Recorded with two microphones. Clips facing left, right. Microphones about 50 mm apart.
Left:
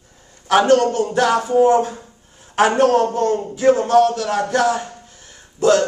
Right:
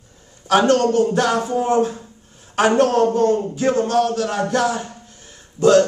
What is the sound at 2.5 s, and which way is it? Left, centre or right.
A man's voice, centre.